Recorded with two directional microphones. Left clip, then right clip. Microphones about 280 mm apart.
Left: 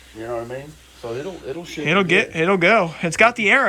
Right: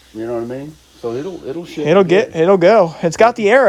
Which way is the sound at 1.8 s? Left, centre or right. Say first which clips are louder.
Right 6 dB; centre.